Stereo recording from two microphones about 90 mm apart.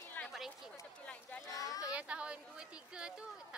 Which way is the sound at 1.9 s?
15° right (ahead or behind).